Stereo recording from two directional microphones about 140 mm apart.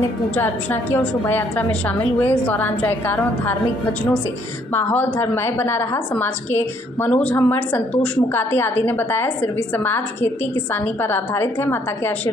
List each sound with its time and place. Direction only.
0.4 s a woman's voice: 15° left (ahead or behind)
4.7 s a woman's voice: 15° left (ahead or behind)